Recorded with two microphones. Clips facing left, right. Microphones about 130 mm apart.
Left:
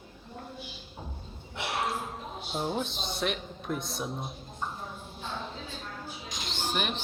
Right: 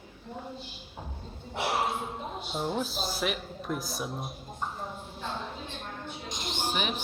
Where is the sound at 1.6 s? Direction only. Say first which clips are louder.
Right 4 dB; 30° right (ahead or behind).